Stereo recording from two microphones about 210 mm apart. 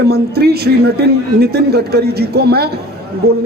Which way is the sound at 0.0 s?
50° right (ahead or behind).